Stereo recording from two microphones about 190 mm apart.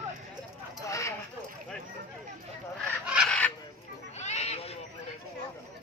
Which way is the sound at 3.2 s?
5° left (ahead or behind).